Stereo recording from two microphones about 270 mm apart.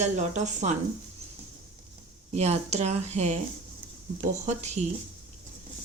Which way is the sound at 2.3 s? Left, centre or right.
Right.